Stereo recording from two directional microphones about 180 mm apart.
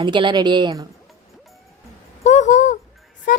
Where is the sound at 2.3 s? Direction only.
40° left (ahead or behind).